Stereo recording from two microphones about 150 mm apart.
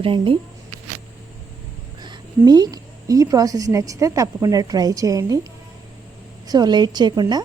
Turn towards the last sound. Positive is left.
turn(degrees=-30)  # may be behind; listen again after turning